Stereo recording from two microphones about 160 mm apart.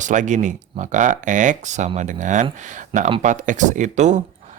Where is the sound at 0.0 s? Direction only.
50° right (ahead or behind).